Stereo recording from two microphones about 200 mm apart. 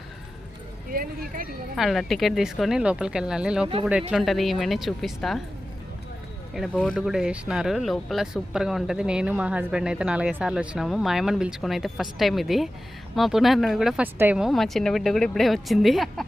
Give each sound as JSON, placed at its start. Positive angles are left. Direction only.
{"t": 0.9, "sound": "speech", "side_deg": -45}
{"t": 1.7, "sound": "speech", "side_deg": 0}
{"t": 6.5, "sound": "speech", "side_deg": 0}